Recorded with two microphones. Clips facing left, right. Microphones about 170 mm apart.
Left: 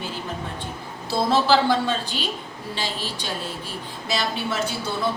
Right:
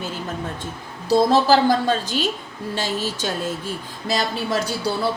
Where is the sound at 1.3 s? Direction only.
40° right (ahead or behind).